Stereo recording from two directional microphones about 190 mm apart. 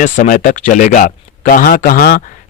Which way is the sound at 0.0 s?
40° left (ahead or behind).